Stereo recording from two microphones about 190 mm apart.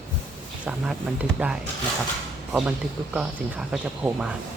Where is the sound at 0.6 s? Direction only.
5° right (ahead or behind).